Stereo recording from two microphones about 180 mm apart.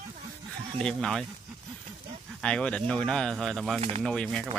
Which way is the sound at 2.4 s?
5° left (ahead or behind).